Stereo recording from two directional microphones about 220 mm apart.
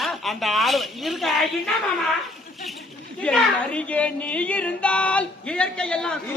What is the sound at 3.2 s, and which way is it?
Speech, 5° left (ahead or behind).